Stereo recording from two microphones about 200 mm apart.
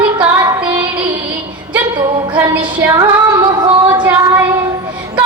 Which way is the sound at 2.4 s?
10° right (ahead or behind).